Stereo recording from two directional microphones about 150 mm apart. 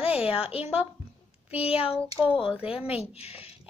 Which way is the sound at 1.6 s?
40° left (ahead or behind).